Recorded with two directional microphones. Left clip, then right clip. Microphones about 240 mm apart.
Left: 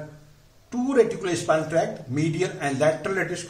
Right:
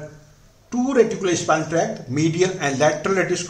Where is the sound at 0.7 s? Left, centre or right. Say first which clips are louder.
Right 3 dB; centre.